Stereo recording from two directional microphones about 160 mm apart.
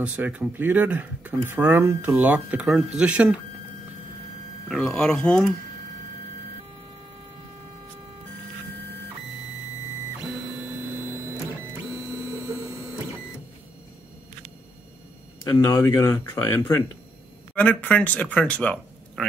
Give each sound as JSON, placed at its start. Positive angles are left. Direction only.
{"t": 0.0, "sound": "speech", "side_deg": -5}
{"t": 4.6, "sound": "speech", "side_deg": 0}
{"t": 15.4, "sound": "speech", "side_deg": 20}